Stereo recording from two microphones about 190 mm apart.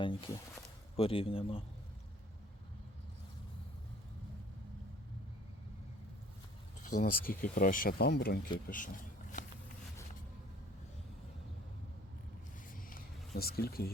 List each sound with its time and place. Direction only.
0.0 s speech: 25° left (ahead or behind)
6.8 s speech: 50° left (ahead or behind)
8.5 s speech: 45° left (ahead or behind)
12.7 s vehicle: 50° left (ahead or behind)